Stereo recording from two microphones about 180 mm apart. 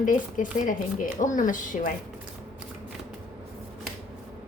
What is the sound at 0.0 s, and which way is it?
Speech, 45° left (ahead or behind).